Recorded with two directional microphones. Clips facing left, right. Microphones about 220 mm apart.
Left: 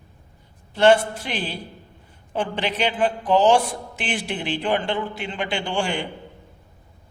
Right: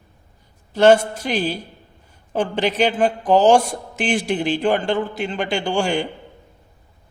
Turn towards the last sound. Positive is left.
turn(degrees=-40)  # may be behind; listen again after turning